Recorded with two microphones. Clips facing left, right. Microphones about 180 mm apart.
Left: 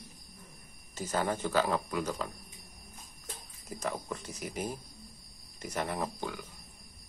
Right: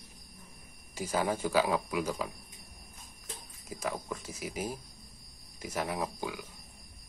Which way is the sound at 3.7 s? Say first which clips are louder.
Even; 5° right (ahead or behind).